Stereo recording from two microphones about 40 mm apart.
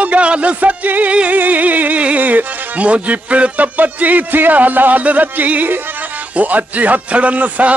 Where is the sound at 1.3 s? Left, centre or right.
Right.